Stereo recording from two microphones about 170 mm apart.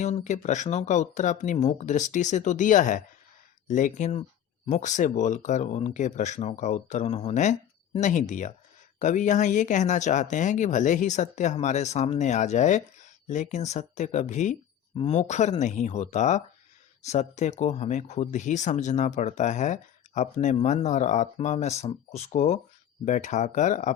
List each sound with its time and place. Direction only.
0.0 s speech: 45° left (ahead or behind)